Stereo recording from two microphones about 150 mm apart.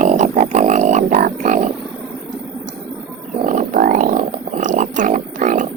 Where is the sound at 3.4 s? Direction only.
60° right (ahead or behind).